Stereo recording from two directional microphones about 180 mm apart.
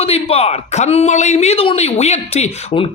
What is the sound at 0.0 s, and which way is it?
Speech, 35° left (ahead or behind).